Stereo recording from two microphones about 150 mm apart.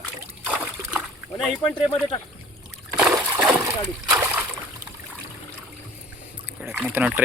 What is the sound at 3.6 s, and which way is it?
Splash, 20° right (ahead or behind).